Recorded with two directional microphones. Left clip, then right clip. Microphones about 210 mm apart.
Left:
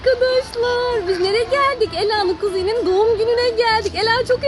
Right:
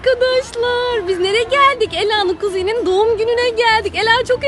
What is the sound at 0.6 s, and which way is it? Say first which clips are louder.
Female singing: right 2 dB; 5° right (ahead or behind).